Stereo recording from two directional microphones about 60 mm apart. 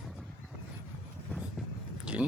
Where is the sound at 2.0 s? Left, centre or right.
Centre.